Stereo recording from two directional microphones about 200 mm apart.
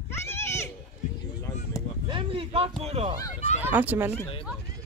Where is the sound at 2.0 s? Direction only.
25° right (ahead or behind).